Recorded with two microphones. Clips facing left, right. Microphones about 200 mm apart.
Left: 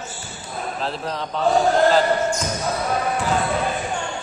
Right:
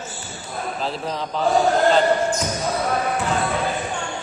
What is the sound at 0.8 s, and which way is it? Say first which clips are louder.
Speech: even; centre (ahead or behind).